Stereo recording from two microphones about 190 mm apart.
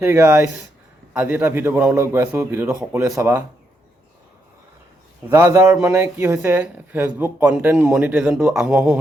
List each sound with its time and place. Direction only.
0.0 s speech: 10° right (ahead or behind)
5.3 s speech: 15° right (ahead or behind)